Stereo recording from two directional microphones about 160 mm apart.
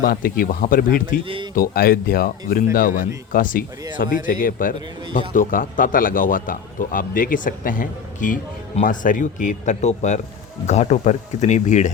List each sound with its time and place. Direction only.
0.0 s a man's voice: 65° left (ahead or behind)
1.2 s speech: 35° right (ahead or behind)
1.5 s a man's voice: 65° left (ahead or behind)